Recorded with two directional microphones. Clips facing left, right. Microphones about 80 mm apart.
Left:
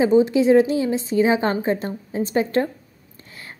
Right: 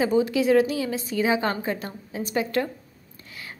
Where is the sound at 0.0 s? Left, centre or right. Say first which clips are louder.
Left 6 dB; left.